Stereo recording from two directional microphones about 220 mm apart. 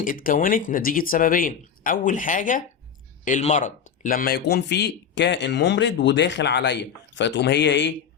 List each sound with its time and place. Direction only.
0.0 s a man's voice: 40° left (ahead or behind)